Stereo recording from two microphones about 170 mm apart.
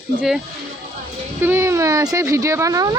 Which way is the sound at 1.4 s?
15° right (ahead or behind).